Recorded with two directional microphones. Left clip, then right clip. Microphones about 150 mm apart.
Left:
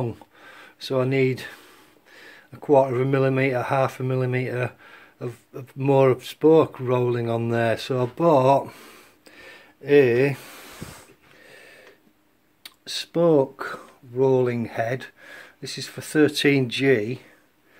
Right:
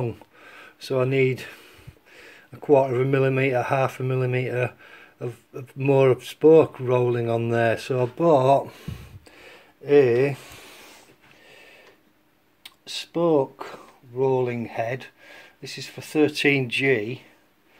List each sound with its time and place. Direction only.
0.0 s speech: 10° left (ahead or behind); by 17.2 s 35° left (ahead or behind)